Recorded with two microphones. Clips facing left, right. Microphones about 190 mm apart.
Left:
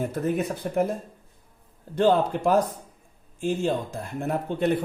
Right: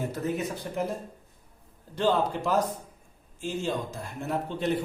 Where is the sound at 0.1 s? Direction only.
55° left (ahead or behind).